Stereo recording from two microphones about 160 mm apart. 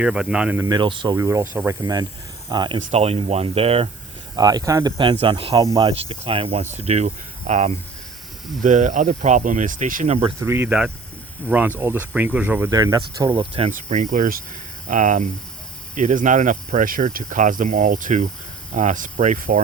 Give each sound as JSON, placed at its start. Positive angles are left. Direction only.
{"t": 0.0, "sound": "speech", "side_deg": -5}
{"t": 0.6, "sound": "speech", "side_deg": -25}
{"t": 1.1, "sound": "speech", "side_deg": -20}
{"t": 4.4, "sound": "speech", "side_deg": -25}
{"t": 10.4, "sound": "speech", "side_deg": -15}
{"t": 12.7, "sound": "speech", "side_deg": -25}
{"t": 13.7, "sound": "speech", "side_deg": -50}